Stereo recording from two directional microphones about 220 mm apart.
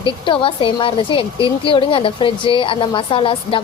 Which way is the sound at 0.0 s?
25° left (ahead or behind).